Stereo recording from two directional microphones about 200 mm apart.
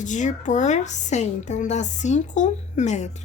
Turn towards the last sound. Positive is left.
turn(degrees=35)  # may be behind; listen again after turning